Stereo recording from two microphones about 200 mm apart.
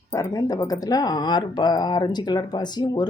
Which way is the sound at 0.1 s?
15° left (ahead or behind).